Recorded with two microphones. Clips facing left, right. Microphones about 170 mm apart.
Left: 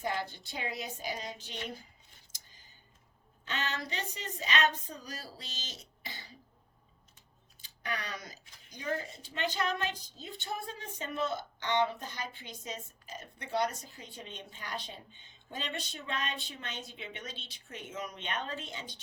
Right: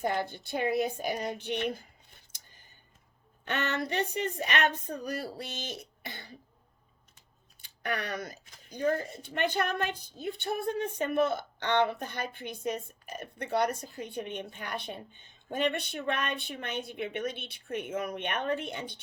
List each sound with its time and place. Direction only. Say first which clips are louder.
0.0 s speech: right 5 dB; 55° right (ahead or behind)
2.3 s a sound: right 2 dB; 60° right (ahead or behind)
3.4 s speech: right 6 dB; 60° right (ahead or behind)
7.6 s speech: right 5 dB; 60° right (ahead or behind)